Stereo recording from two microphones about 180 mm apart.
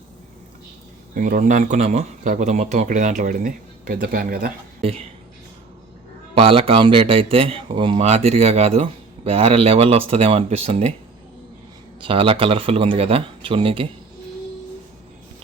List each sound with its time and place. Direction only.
1.1 s speech: 50° right (ahead or behind)
4.8 s speech: 35° right (ahead or behind)
6.3 s speech: 30° right (ahead or behind)
11.9 s speech: 30° right (ahead or behind)